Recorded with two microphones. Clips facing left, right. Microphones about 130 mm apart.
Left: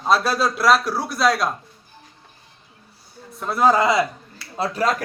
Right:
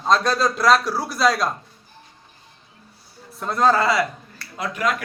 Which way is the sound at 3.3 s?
5° left (ahead or behind).